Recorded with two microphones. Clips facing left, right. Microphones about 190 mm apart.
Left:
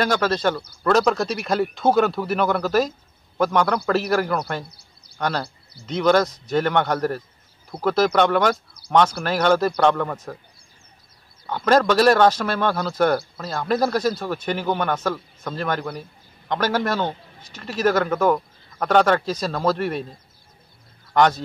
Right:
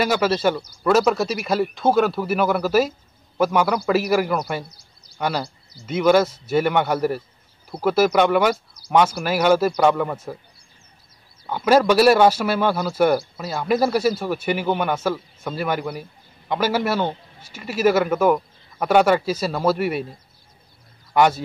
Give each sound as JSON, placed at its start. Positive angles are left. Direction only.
{"t": 0.0, "sound": "speech", "side_deg": -10}
{"t": 4.6, "sound": "a sound", "side_deg": 60}
{"t": 5.1, "sound": "speech", "side_deg": -10}
{"t": 11.4, "sound": "speech", "side_deg": -10}
{"t": 21.1, "sound": "speech", "side_deg": -10}